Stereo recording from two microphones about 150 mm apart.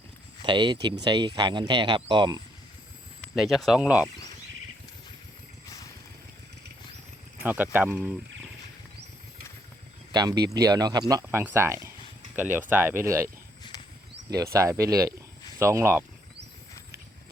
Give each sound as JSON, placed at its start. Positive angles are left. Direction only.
{"t": 0.4, "sound": "speech", "side_deg": -30}
{"t": 3.3, "sound": "speech", "side_deg": 0}
{"t": 7.4, "sound": "speech", "side_deg": -10}
{"t": 10.1, "sound": "speech", "side_deg": -25}